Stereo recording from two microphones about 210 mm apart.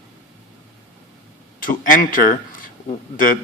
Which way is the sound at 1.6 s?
40° left (ahead or behind).